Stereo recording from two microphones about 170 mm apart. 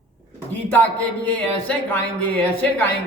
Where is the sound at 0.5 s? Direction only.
10° left (ahead or behind).